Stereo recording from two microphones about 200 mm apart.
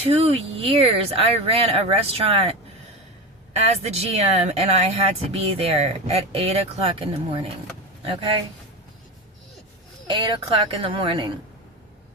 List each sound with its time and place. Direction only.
0.0 s speech: 30° right (ahead or behind)
10.1 s speech: 25° right (ahead or behind)